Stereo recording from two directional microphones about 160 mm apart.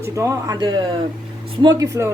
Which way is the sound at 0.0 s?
20° right (ahead or behind).